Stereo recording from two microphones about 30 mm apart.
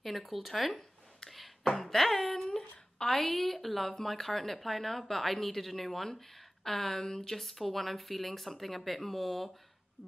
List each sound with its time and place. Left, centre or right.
0.0 s speech: centre
1.3 s a sound: centre
1.8 s speech: centre
2.3 s a sound: centre
3.3 s speech: centre
7.3 s speech: centre